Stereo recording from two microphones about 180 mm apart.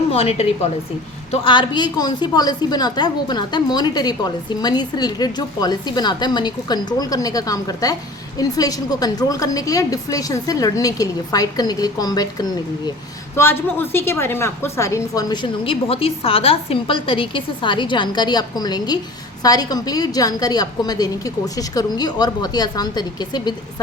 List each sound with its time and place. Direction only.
0.1 s a woman's voice: 35° left (ahead or behind)